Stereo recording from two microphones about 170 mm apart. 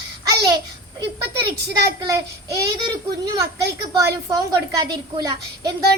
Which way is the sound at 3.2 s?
20° right (ahead or behind).